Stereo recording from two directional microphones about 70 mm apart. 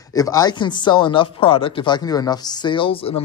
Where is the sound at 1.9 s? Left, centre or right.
Left.